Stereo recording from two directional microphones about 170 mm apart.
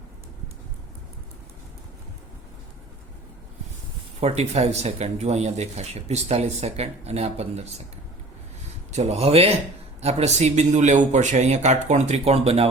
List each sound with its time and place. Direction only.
4.2 s speech: 40° right (ahead or behind)
8.9 s speech: 40° right (ahead or behind)